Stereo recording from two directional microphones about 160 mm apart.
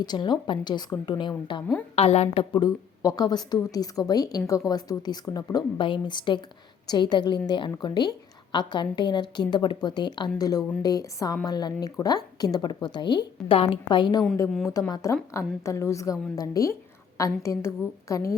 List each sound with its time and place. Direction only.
0.0 s a woman's voice: 25° left (ahead or behind)
2.0 s a woman's voice: 40° left (ahead or behind); by 18.2 s 20° left (ahead or behind)